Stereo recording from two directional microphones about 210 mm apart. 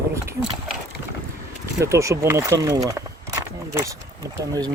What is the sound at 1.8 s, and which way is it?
Speech, 15° right (ahead or behind).